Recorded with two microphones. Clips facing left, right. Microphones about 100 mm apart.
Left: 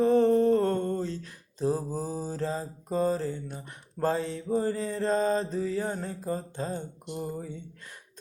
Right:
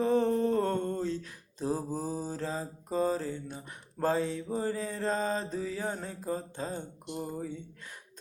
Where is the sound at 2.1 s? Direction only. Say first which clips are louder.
Left 3 dB; 10° right (ahead or behind).